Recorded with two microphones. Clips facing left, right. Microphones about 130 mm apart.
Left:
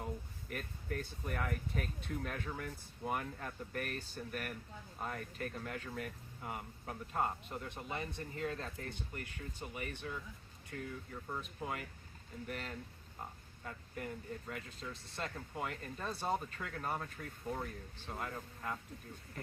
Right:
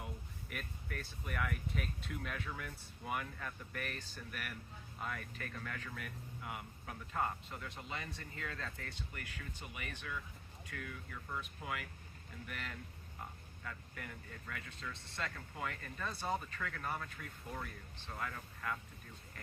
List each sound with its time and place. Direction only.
0.5 s speech: 35° left (ahead or behind)